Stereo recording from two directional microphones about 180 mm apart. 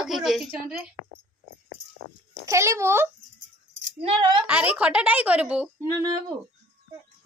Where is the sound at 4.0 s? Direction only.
30° right (ahead or behind).